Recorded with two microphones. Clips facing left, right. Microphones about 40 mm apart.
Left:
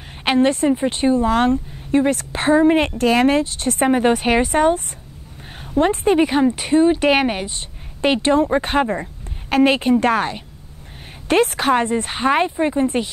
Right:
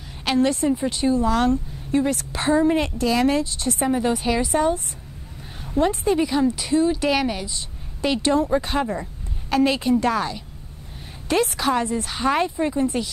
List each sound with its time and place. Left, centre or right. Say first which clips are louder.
0.2 s speech: left 4 dB; left